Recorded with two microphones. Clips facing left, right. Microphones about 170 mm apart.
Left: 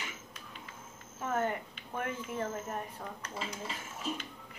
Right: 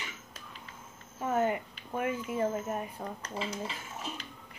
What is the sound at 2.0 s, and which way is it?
Speech, 10° right (ahead or behind).